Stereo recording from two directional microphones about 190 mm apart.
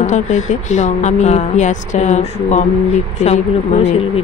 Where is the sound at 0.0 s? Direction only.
40° left (ahead or behind).